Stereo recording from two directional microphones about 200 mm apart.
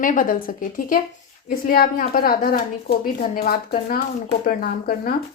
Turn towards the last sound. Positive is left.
turn(degrees=50)  # may be behind; listen again after turning